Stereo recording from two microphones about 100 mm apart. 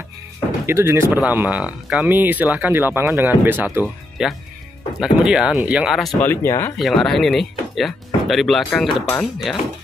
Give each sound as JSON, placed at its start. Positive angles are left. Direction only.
{"t": 0.7, "sound": "speech", "side_deg": -25}
{"t": 3.8, "sound": "speech", "side_deg": 0}
{"t": 6.2, "sound": "speech", "side_deg": 25}
{"t": 6.8, "sound": "speech", "side_deg": 0}